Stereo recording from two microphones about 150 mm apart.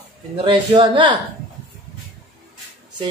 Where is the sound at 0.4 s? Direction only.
35° right (ahead or behind).